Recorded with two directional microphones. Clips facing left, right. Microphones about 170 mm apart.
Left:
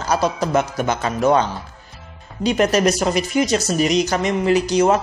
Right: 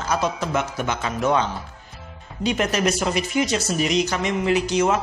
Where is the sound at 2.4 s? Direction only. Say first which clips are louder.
Left 5 dB; 40° left (ahead or behind).